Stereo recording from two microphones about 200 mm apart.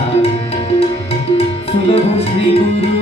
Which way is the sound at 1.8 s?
30° left (ahead or behind).